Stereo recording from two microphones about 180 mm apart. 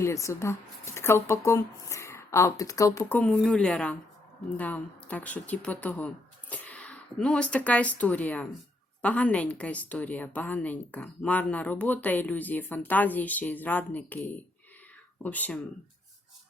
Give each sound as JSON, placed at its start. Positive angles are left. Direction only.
{"t": 0.0, "sound": "a woman's voice", "side_deg": 15}